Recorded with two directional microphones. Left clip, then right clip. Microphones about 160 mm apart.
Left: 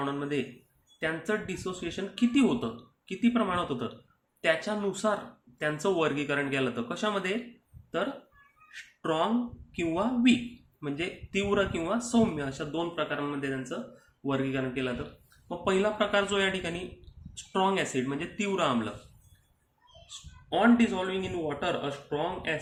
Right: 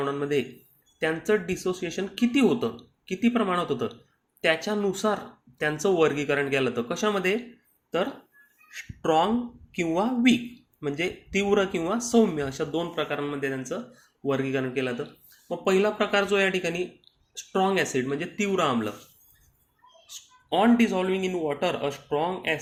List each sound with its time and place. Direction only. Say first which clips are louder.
0.0 s speech: right 5 dB; 30° right (ahead or behind)
8.7 s speech: right 7 dB; 30° right (ahead or behind)
20.5 s speech: right 3 dB; 40° right (ahead or behind)